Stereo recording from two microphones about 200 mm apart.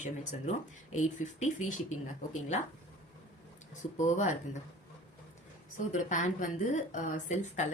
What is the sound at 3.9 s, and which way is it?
Speech, 35° left (ahead or behind).